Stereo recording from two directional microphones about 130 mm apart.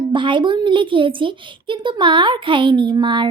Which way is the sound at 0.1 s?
40° right (ahead or behind).